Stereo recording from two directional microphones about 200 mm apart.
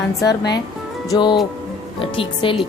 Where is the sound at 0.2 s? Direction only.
20° left (ahead or behind).